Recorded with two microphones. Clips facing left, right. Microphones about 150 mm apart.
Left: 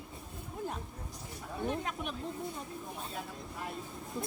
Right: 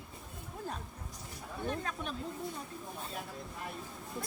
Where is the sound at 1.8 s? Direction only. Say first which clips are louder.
Left 1 dB; 15° left (ahead or behind).